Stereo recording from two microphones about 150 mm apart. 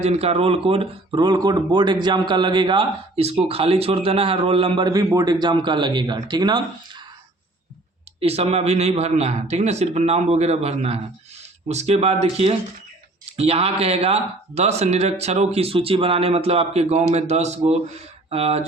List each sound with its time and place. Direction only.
0.0 s a man's voice: 45° right (ahead or behind)
3.2 s a man's voice: 40° right (ahead or behind)
8.2 s speech: 45° right (ahead or behind)